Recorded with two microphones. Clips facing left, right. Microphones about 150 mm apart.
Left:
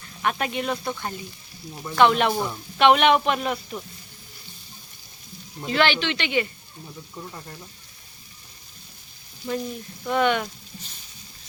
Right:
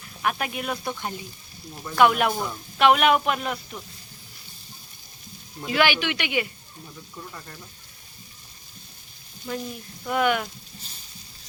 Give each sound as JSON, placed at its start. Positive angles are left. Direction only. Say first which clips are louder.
{"t": 0.2, "sound": "speech", "louder": "left 2 dB", "side_deg": -5}
{"t": 5.6, "sound": "speech", "louder": "left 1 dB", "side_deg": -10}
{"t": 9.5, "sound": "speech", "louder": "left 3 dB", "side_deg": 5}